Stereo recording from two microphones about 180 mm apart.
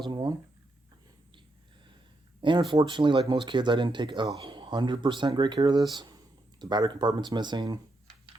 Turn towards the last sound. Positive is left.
turn(degrees=-25)  # may be behind; listen again after turning